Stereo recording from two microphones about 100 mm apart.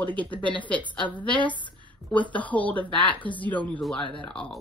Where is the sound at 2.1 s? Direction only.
15° left (ahead or behind).